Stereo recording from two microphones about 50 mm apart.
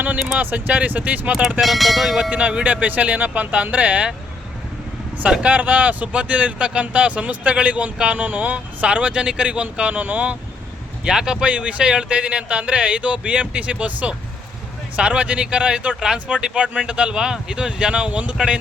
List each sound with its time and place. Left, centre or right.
0.3 s speech: right
1.6 s speech: centre
2.3 s speech: right
2.8 s speech: right
5.2 s speech: right
11.0 s speech: centre
11.4 s speech: right